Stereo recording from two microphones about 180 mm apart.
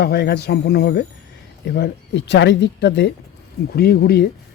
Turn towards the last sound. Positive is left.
turn(degrees=60)  # may be behind; listen again after turning